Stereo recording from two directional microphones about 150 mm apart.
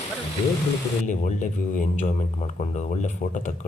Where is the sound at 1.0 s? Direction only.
55° left (ahead or behind).